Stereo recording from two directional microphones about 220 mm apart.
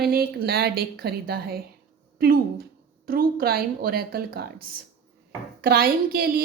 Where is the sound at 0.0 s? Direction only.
45° right (ahead or behind).